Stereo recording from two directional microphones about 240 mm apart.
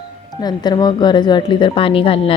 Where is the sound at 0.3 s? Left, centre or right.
Centre.